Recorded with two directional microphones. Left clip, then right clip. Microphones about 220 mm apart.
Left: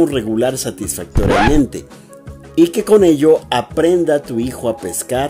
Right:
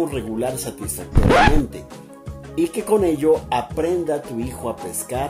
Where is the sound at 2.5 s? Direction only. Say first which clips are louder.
Left 8 dB; 45° left (ahead or behind).